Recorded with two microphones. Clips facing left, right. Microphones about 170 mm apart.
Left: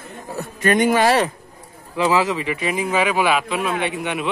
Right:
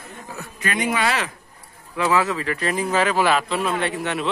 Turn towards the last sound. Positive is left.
turn(degrees=10)  # may be behind; listen again after turning